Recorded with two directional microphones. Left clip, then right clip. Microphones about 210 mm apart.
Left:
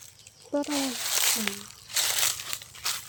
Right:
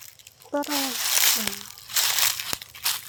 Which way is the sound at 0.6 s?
50° right (ahead or behind).